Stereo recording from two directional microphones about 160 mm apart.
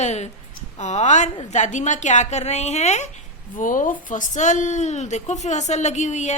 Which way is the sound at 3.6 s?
55° left (ahead or behind).